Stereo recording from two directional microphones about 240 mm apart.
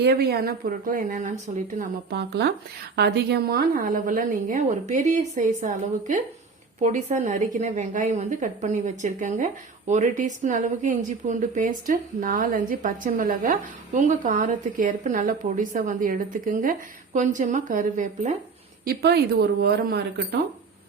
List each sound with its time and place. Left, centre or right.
0.0 s a woman's voice: right
18.9 s a woman's voice: right